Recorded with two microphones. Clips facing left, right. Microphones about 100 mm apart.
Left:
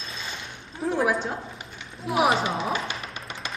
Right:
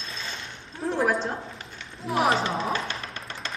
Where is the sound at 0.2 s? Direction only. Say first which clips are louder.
Even; 10° left (ahead or behind).